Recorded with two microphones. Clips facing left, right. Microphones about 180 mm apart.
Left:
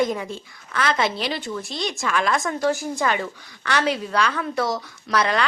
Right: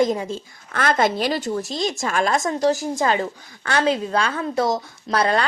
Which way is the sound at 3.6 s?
25° right (ahead or behind).